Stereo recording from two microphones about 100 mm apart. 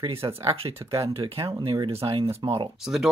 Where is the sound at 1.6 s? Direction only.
40° right (ahead or behind).